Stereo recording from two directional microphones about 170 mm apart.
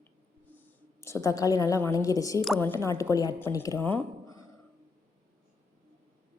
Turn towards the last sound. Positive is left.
turn(degrees=15)  # may be behind; listen again after turning